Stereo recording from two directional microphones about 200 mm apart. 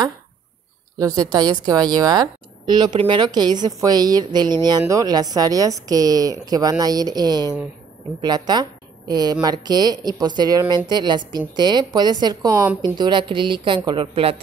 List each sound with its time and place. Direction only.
0.9 s a woman's voice: 20° right (ahead or behind)